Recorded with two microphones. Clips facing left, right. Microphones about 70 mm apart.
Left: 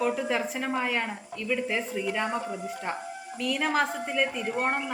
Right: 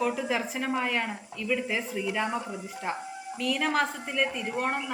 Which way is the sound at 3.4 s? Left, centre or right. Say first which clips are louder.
Even; centre.